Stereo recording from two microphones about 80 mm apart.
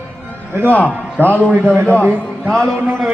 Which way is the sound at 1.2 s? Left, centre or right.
Left.